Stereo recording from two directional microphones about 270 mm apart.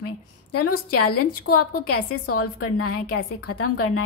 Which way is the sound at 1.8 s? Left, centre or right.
Left.